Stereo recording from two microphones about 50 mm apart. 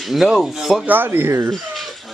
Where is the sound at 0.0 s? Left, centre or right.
Centre.